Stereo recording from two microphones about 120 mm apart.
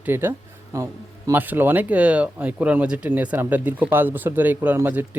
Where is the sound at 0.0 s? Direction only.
20° right (ahead or behind).